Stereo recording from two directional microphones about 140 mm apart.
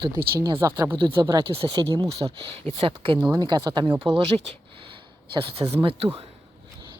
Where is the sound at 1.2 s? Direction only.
30° right (ahead or behind).